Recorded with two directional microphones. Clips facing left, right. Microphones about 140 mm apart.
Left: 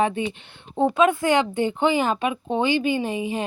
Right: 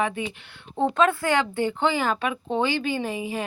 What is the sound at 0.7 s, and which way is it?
Speech, 15° left (ahead or behind).